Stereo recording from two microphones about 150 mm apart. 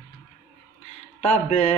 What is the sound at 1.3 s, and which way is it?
Mantra, 55° left (ahead or behind).